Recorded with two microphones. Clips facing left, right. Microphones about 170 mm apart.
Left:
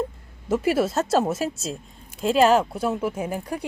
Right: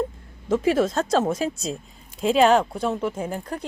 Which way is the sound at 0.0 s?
5° left (ahead or behind).